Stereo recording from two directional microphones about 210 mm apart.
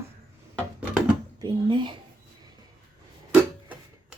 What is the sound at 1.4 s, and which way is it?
Speech, 20° right (ahead or behind).